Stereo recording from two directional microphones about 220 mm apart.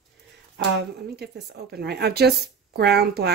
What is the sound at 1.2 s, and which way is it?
Speech, 50° right (ahead or behind).